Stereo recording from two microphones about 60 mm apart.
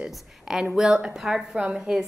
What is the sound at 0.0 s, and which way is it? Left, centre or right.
A woman's voice, centre.